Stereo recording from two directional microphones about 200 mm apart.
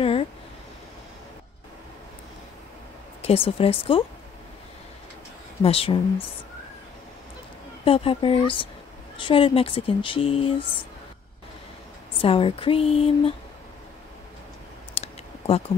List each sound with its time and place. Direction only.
0.0 s a sound: 30° left (ahead or behind)
3.2 s speech: 30° left (ahead or behind)
5.6 s speech: 30° left (ahead or behind)
7.8 s speech: 25° left (ahead or behind)
12.2 s speech: 30° left (ahead or behind)
15.0 s clicking: 30° left (ahead or behind)